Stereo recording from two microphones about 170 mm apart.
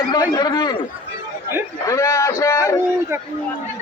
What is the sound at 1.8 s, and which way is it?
Speech, 15° left (ahead or behind).